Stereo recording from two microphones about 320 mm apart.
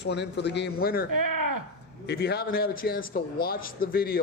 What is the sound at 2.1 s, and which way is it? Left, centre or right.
A man's voice, left.